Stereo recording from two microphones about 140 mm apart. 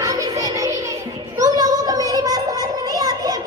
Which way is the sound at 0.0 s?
25° right (ahead or behind).